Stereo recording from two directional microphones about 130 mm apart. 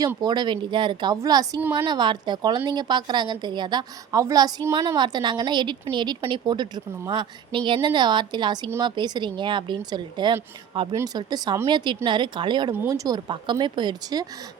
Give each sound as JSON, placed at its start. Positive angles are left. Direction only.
{"t": 0.2, "sound": "a woman's voice", "side_deg": -35}